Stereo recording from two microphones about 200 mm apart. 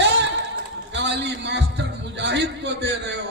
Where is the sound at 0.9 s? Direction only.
60° right (ahead or behind).